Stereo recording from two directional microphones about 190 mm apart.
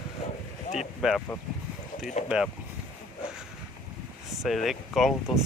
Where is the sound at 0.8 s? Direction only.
Centre (ahead or behind).